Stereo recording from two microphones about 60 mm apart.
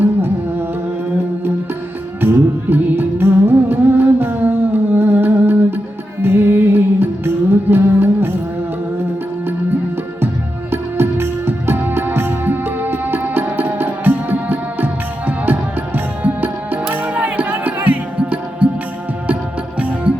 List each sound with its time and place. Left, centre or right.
2.2 s music: right
10.7 s music: right
16.2 s music: right